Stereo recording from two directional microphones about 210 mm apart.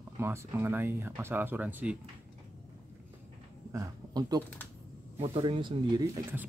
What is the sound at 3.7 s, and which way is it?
Speech, 15° right (ahead or behind).